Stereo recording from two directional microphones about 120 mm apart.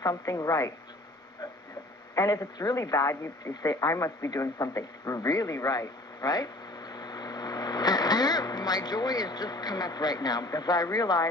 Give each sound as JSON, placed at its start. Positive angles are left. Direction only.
{"t": 0.0, "sound": "a woman's voice", "side_deg": 30}
{"t": 2.1, "sound": "speech", "side_deg": 30}